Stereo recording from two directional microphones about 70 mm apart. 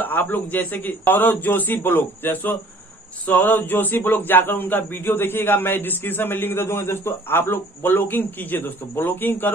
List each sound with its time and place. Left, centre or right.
0.0 s speech: left